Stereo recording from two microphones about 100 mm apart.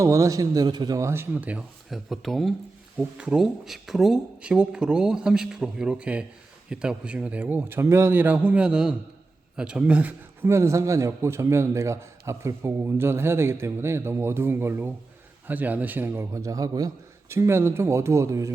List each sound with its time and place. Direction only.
0.0 s speech: 30° right (ahead or behind); by 1.6 s 15° right (ahead or behind)
1.9 s a man's voice: centre (ahead or behind)
10.5 s a man's voice: 30° right (ahead or behind)
17.3 s a man's voice: 25° right (ahead or behind)